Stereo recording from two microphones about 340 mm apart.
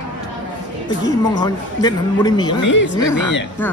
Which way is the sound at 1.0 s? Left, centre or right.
Centre.